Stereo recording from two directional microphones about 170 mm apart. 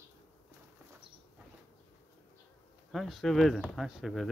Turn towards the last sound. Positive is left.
turn(degrees=0)  # may be behind; listen again after turning